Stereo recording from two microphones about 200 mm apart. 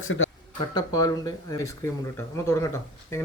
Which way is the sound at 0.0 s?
85° left.